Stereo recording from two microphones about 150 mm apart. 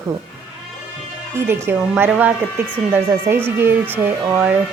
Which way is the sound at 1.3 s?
15° right (ahead or behind).